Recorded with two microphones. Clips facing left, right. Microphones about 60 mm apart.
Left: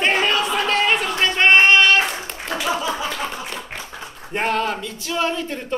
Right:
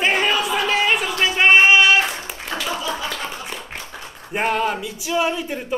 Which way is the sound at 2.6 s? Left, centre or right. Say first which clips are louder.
Left 3 dB; centre.